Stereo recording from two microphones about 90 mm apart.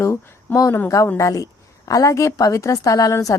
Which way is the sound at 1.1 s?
40° left (ahead or behind).